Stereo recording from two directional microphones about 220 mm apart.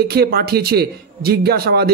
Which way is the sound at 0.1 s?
45° right (ahead or behind).